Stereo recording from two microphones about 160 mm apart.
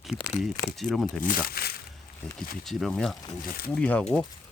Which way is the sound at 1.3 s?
70° left (ahead or behind).